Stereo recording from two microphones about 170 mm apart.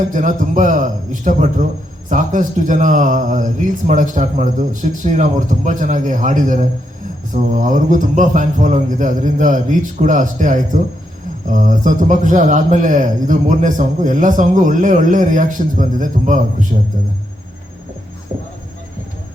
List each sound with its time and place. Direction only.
0.1 s a man's voice: 50° right (ahead or behind)